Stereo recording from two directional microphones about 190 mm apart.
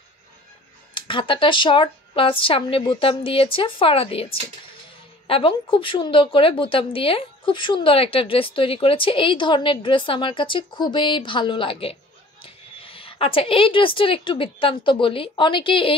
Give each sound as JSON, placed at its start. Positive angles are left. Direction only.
{"t": 0.9, "sound": "a woman's voice", "side_deg": 25}